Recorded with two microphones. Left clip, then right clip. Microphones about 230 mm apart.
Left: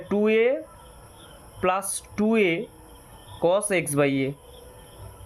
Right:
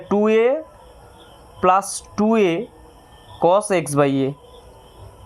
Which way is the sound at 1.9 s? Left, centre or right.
Centre.